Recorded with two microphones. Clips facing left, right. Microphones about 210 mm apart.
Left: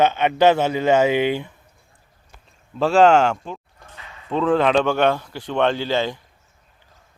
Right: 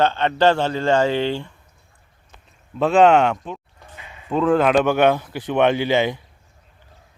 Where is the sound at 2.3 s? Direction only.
Centre (ahead or behind).